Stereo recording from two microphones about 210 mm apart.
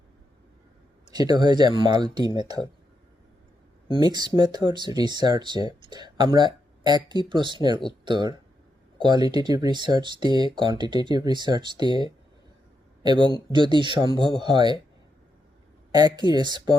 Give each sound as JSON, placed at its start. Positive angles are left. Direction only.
{"t": 1.1, "sound": "speech", "side_deg": -20}
{"t": 3.8, "sound": "a man's voice", "side_deg": -20}
{"t": 15.9, "sound": "speech", "side_deg": -20}